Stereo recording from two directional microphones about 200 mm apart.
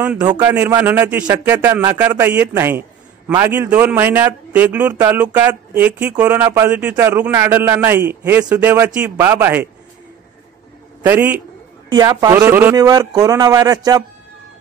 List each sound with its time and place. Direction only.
0.2 s a man's voice: 20° right (ahead or behind)
11.0 s speech: 10° right (ahead or behind)
11.9 s speech: 20° right (ahead or behind)